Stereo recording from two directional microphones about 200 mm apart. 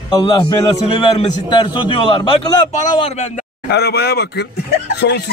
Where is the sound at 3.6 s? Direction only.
55° left (ahead or behind).